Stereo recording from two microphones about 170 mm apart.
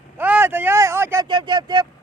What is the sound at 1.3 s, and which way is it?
Speech, 25° right (ahead or behind).